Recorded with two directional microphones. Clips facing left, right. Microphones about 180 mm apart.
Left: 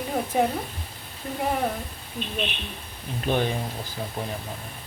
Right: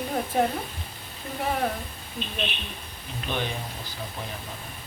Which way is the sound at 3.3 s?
50° left (ahead or behind).